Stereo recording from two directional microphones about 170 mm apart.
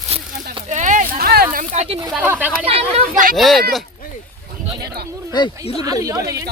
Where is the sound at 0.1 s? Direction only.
40° right (ahead or behind); by 1.6 s 65° right (ahead or behind).